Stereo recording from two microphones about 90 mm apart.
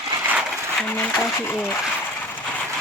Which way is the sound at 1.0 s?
20° left (ahead or behind).